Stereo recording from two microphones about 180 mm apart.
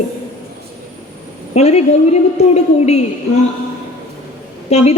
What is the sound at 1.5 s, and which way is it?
Speech, 35° left (ahead or behind).